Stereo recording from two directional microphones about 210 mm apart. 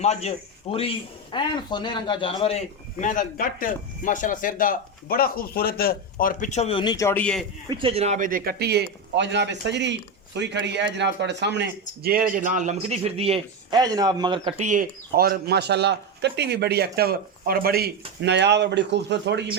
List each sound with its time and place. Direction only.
0.0 s speech: 30° left (ahead or behind); by 7.4 s 5° left (ahead or behind)
7.7 s a man's voice: 25° right (ahead or behind)
14.7 s a man's voice: 45° right (ahead or behind)